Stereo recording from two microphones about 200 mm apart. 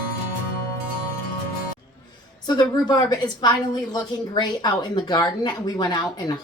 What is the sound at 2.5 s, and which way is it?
Speech, 20° left (ahead or behind).